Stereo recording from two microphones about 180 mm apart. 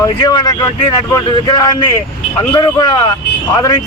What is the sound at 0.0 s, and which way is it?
Speech, 20° left (ahead or behind).